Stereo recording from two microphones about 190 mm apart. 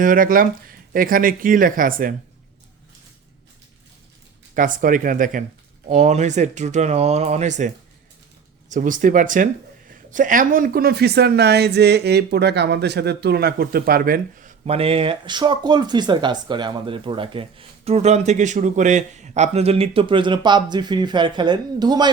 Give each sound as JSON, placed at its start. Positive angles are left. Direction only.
{"t": 0.0, "sound": "speech", "side_deg": -45}
{"t": 4.5, "sound": "speech", "side_deg": -45}
{"t": 8.7, "sound": "speech", "side_deg": -45}